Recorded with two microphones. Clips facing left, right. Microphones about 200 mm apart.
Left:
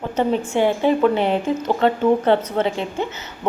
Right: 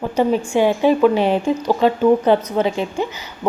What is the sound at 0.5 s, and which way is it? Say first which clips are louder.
A woman's voice: right 2 dB; 15° right (ahead or behind).